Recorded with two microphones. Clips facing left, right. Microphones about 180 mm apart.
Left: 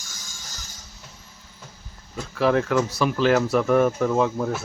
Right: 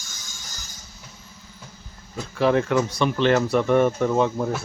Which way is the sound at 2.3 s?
Centre (ahead or behind).